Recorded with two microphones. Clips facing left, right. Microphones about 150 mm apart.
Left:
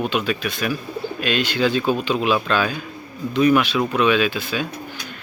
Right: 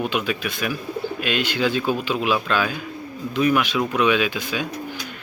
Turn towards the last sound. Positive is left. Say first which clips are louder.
# left 2 dB
turn(degrees=-15)  # may be behind; listen again after turning